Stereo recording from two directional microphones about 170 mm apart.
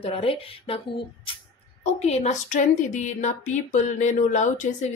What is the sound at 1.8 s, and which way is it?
A woman's voice, 40° left (ahead or behind).